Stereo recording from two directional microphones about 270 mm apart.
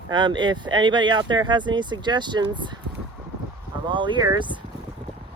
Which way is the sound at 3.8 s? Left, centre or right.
Centre.